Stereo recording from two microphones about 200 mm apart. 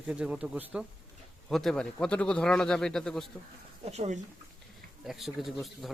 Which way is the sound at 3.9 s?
35° right (ahead or behind).